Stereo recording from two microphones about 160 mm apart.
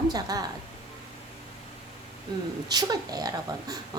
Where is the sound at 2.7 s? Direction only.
25° right (ahead or behind).